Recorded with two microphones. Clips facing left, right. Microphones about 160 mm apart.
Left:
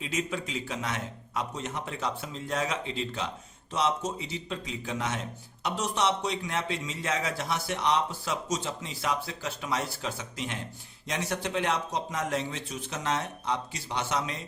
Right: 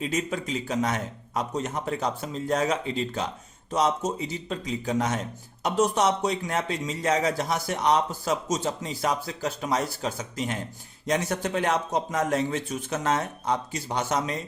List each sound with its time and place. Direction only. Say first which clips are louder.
0.0 s a man's voice: right 4 dB; 40° right (ahead or behind)